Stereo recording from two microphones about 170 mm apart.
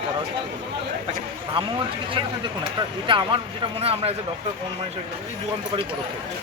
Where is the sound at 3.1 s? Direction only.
30° right (ahead or behind).